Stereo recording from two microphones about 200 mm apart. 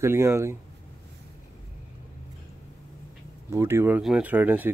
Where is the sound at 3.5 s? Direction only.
15° right (ahead or behind).